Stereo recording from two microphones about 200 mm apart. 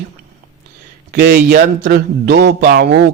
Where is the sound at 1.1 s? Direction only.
55° right (ahead or behind).